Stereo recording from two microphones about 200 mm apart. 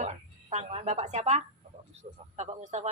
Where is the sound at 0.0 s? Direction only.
35° right (ahead or behind).